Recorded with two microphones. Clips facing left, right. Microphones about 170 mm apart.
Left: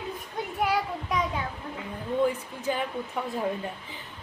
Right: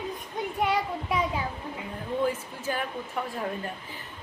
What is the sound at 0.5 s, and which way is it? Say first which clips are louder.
Speech: even; centre (ahead or behind).